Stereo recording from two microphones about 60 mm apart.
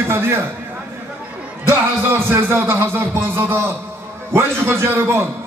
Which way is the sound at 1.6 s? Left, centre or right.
Right.